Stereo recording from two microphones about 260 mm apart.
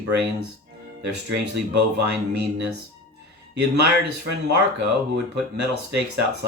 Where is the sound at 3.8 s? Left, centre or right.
Right.